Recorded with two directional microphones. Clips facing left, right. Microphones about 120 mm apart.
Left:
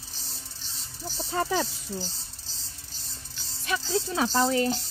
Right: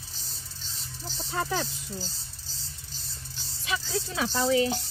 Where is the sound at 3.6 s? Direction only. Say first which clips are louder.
Left 3 dB; 50° left (ahead or behind).